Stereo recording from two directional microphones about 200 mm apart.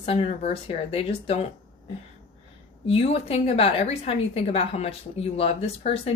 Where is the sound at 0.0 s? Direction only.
30° left (ahead or behind).